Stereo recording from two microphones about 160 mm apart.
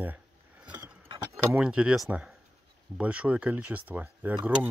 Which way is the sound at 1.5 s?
5° right (ahead or behind).